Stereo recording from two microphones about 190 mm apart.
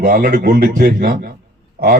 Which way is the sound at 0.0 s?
50° right (ahead or behind).